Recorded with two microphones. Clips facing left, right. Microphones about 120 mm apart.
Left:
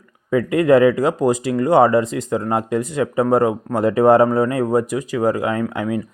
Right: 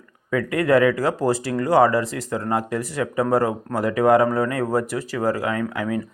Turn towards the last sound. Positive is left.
turn(degrees=20)  # may be behind; listen again after turning